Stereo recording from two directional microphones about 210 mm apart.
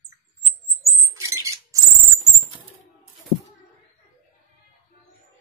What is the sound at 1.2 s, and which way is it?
Bird, 15° right (ahead or behind).